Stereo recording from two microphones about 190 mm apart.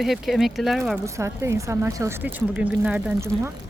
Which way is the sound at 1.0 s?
15° right (ahead or behind).